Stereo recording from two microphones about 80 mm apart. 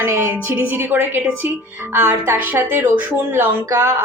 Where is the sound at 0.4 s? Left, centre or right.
Right.